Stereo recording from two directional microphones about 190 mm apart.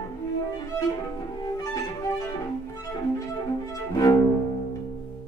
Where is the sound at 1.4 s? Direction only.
20° left (ahead or behind).